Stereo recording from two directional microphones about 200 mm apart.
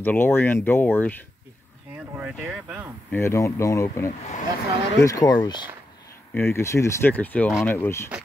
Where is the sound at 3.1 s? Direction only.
15° left (ahead or behind).